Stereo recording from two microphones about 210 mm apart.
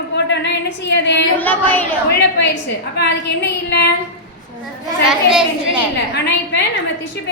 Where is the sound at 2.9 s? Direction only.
50° left (ahead or behind).